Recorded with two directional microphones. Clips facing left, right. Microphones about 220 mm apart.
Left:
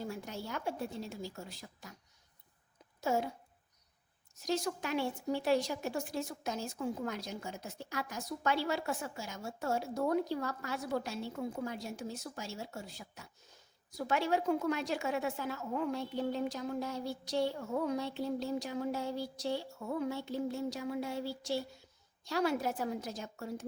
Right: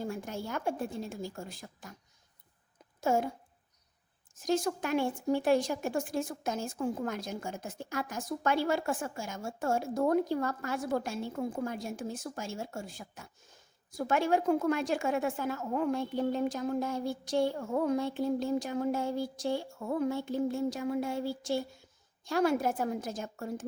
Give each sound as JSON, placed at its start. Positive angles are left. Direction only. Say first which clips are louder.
{"t": 0.0, "sound": "a woman's voice", "louder": "right 4 dB", "side_deg": -50}
{"t": 3.0, "sound": "speech", "louder": "right 4 dB", "side_deg": -50}
{"t": 4.4, "sound": "a woman's voice", "louder": "right 5 dB", "side_deg": -50}